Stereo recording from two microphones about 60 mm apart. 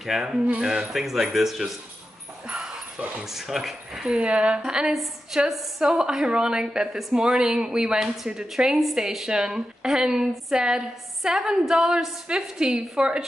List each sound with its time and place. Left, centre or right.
0.0 s a woman's voice: centre
2.4 s dog: centre
3.3 s speech: centre
4.1 s a woman's voice: centre
4.9 s a woman's voice: centre